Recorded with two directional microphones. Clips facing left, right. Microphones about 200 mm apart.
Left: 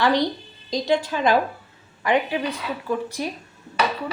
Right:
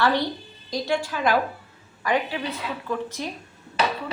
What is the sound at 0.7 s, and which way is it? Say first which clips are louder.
A woman's voice: left 4 dB; 20° left (ahead or behind).